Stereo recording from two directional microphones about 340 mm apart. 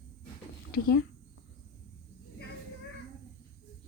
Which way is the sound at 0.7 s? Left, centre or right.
Left.